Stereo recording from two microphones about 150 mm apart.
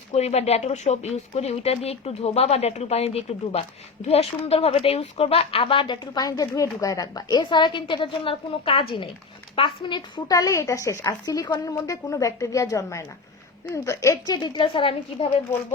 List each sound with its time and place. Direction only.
0.1 s speech: 45° left (ahead or behind)